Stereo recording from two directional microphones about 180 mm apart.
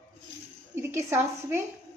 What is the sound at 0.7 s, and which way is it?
Dishes, 15° right (ahead or behind).